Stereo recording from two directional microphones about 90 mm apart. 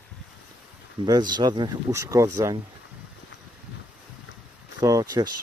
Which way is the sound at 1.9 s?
35° right (ahead or behind).